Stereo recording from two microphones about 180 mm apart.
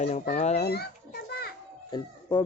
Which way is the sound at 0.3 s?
35° left (ahead or behind).